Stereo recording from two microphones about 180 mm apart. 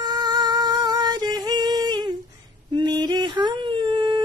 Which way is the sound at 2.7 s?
25° right (ahead or behind).